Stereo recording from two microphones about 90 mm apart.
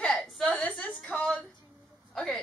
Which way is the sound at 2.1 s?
5° left (ahead or behind).